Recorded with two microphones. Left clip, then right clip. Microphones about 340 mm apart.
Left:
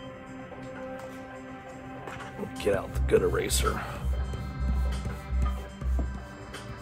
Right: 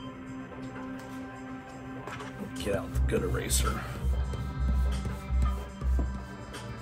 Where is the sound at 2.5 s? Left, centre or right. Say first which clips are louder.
Left 5 dB; left.